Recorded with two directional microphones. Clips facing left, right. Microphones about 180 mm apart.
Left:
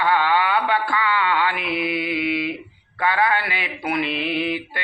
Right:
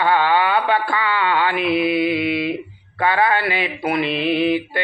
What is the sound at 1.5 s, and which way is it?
Mantra, 30° right (ahead or behind).